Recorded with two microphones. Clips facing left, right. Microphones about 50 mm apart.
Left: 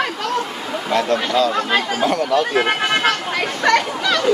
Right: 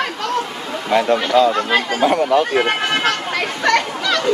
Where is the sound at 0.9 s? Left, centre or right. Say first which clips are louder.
Right 3 dB; centre.